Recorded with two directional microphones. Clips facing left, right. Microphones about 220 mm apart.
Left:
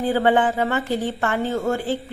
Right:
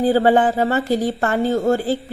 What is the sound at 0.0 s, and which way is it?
A woman's voice, 35° right (ahead or behind).